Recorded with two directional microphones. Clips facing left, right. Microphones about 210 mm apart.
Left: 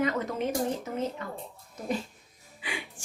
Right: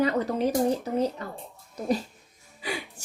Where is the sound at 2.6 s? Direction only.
40° right (ahead or behind).